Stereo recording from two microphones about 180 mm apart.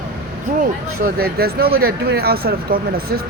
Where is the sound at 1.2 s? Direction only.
60° right (ahead or behind).